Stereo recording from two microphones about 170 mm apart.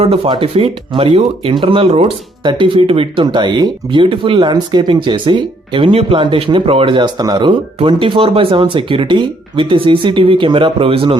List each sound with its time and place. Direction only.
0.0 s speech: 35° right (ahead or behind)